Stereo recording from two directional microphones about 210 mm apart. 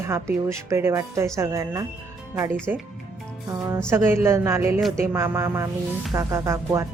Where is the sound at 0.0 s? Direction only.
10° right (ahead or behind).